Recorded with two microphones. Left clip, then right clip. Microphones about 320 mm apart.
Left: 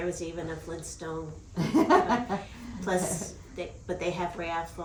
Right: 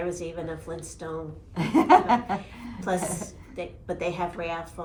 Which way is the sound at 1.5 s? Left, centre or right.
Right.